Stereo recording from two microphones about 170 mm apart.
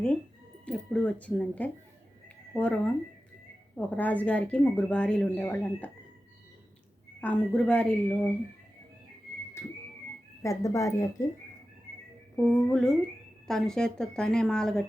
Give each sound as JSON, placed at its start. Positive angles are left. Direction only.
{"t": 0.6, "sound": "a sound", "side_deg": 5}
{"t": 2.5, "sound": "speech", "side_deg": 5}
{"t": 7.2, "sound": "speech", "side_deg": 5}
{"t": 10.4, "sound": "speech", "side_deg": 20}
{"t": 12.4, "sound": "speech", "side_deg": 5}